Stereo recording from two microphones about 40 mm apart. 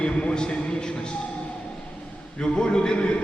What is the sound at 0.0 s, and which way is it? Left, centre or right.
Speech, left.